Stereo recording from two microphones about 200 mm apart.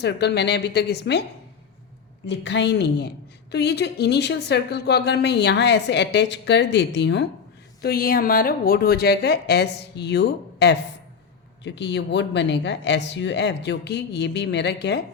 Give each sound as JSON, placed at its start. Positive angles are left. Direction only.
{"t": 0.0, "sound": "speech", "side_deg": 55}
{"t": 2.2, "sound": "speech", "side_deg": 60}
{"t": 7.8, "sound": "a woman's voice", "side_deg": 50}